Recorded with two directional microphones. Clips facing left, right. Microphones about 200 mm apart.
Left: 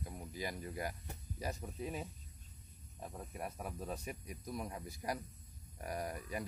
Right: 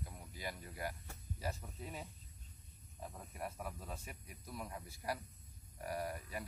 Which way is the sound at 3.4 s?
15° left (ahead or behind).